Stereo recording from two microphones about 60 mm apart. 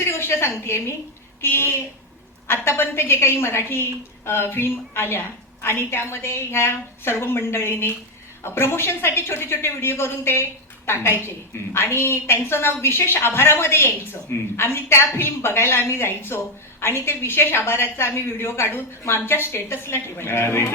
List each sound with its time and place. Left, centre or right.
0.1 s a woman's voice: left